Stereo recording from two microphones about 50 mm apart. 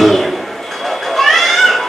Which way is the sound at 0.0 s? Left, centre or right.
Centre.